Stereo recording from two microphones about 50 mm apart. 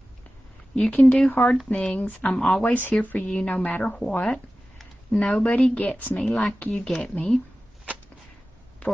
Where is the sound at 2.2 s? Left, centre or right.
Centre.